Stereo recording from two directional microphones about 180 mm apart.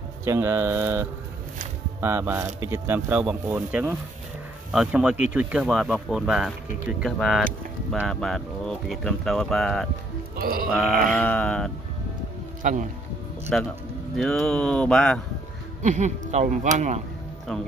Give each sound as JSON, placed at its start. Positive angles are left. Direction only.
{"t": 0.2, "sound": "speech", "side_deg": -15}
{"t": 10.3, "sound": "music", "side_deg": -55}
{"t": 10.7, "sound": "speech", "side_deg": 0}
{"t": 13.5, "sound": "speech", "side_deg": 5}
{"t": 15.8, "sound": "speech", "side_deg": -40}